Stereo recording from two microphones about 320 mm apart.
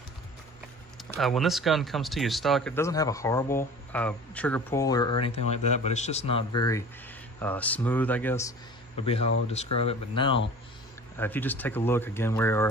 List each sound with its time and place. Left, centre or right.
1.2 s speech: centre
9.0 s speech: centre